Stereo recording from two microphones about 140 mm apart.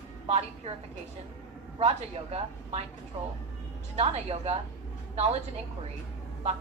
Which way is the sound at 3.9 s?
45° right (ahead or behind).